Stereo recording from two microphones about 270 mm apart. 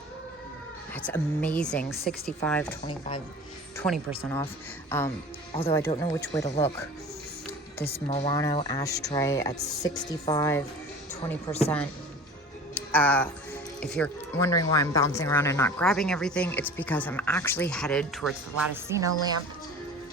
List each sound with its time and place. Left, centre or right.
0.9 s speech: centre
3.8 s speech: centre
5.5 s speech: left
7.8 s speech: left
12.9 s speech: centre
18.7 s speech: centre